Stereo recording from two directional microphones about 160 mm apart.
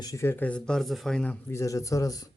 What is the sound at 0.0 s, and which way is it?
Speech, 20° left (ahead or behind).